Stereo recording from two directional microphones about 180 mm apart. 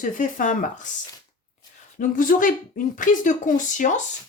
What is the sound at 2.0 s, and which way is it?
A woman's voice, 50° left (ahead or behind).